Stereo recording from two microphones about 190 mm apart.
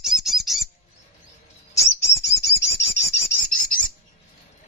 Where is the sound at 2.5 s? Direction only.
15° left (ahead or behind).